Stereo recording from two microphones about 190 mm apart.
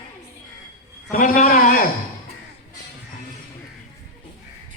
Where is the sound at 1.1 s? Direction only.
45° left (ahead or behind).